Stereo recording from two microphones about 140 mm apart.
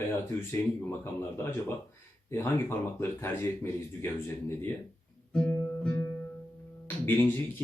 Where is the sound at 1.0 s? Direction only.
15° left (ahead or behind).